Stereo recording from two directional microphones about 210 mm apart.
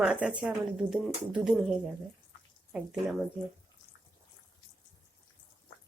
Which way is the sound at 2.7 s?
5° right (ahead or behind).